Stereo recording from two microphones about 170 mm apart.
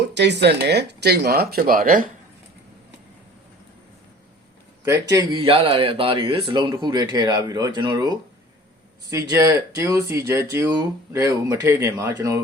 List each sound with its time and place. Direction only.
0.1 s speech: 90° right; by 2.0 s 55° right (ahead or behind)
4.9 s speech: 20° right (ahead or behind)